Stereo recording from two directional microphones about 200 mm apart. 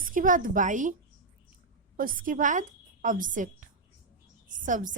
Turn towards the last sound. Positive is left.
turn(degrees=-40)  # may be behind; listen again after turning